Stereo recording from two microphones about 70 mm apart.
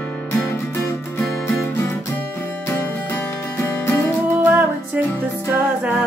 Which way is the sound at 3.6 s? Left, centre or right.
Left.